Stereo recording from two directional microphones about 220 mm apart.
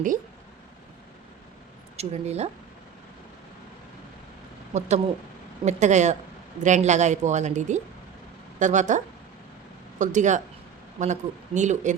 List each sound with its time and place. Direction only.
2.0 s speech: 30° right (ahead or behind)
4.7 s a woman's voice: 30° right (ahead or behind)
10.0 s a woman's voice: 35° right (ahead or behind)